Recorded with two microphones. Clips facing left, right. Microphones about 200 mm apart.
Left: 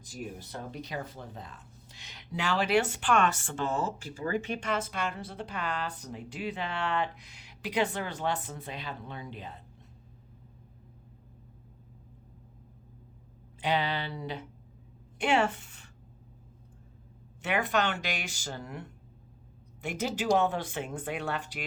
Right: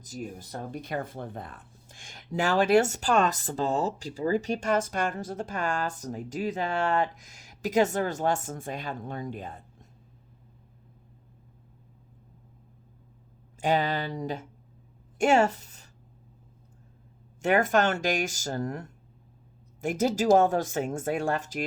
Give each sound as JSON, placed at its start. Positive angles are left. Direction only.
{"t": 0.0, "sound": "speech", "side_deg": -40}
{"t": 13.6, "sound": "a woman's voice", "side_deg": -45}
{"t": 17.4, "sound": "speech", "side_deg": -45}